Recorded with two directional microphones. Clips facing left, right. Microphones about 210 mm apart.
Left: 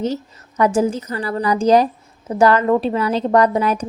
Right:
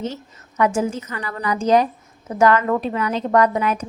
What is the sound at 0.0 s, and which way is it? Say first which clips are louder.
A woman's voice: left 6 dB; 35° left (ahead or behind).